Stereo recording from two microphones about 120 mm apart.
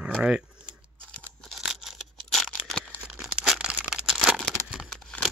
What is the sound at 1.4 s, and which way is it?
Scissors, centre (ahead or behind).